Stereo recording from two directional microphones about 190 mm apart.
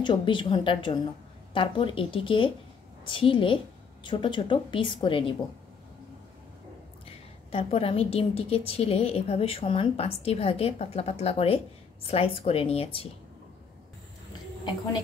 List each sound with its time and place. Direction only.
0.0 s a woman's voice: 25° left (ahead or behind)
7.5 s a woman's voice: 30° left (ahead or behind)